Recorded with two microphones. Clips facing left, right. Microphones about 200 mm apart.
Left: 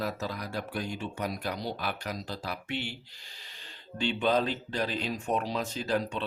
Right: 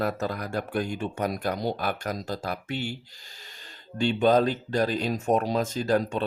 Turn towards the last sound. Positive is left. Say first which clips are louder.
# right 6 dB
turn(degrees=-45)  # may be behind; listen again after turning